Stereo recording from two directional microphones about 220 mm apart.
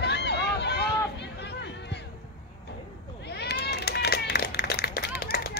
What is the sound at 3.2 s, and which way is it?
Run, 50° left (ahead or behind).